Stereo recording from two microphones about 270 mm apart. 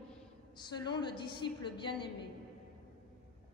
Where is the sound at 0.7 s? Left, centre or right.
Centre.